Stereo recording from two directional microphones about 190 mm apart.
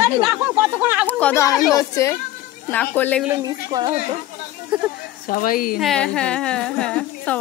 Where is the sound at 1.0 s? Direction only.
10° left (ahead or behind).